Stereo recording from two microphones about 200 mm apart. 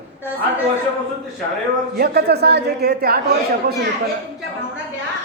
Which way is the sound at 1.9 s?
50° right (ahead or behind).